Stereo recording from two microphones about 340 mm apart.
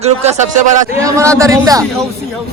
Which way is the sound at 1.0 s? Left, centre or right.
Centre.